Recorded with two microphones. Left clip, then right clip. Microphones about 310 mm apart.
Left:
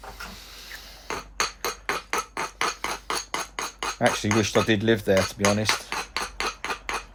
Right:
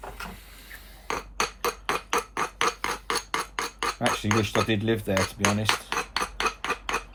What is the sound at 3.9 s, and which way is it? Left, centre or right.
Speech, left.